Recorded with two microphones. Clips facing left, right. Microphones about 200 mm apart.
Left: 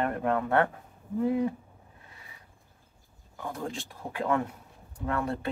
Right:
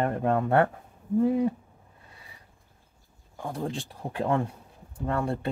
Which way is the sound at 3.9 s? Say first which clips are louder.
Right 1 dB; 30° right (ahead or behind).